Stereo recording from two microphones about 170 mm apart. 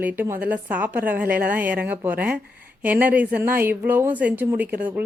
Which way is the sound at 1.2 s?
60° right (ahead or behind).